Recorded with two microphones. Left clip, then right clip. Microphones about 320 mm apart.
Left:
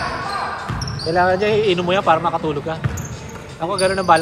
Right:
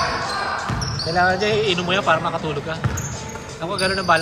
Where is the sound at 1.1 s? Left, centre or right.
Left.